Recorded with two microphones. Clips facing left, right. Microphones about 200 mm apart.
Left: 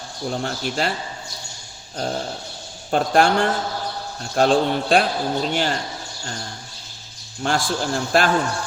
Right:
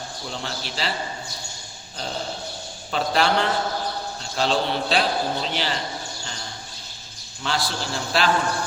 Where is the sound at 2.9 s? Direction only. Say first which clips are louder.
Left 4 dB; 50° left (ahead or behind).